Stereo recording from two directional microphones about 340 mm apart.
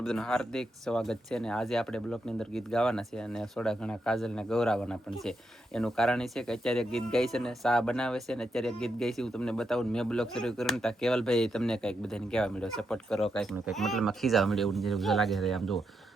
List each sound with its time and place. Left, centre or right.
0.0 s speech: centre